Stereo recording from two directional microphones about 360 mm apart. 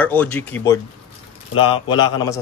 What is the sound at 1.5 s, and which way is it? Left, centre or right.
Speech, left.